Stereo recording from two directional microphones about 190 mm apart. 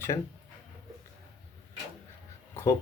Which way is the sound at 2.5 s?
15° left (ahead or behind).